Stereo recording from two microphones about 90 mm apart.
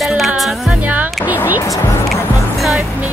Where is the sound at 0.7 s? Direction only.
20° right (ahead or behind).